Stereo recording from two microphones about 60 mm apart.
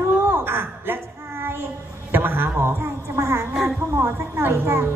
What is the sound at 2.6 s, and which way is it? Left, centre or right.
A woman's voice, right.